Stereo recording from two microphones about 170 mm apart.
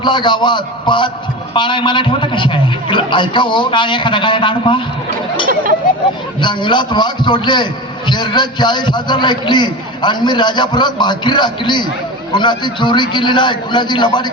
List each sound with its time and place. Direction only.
0.0 s a man's voice: 25° left (ahead or behind)
6.4 s a man's voice: 25° left (ahead or behind)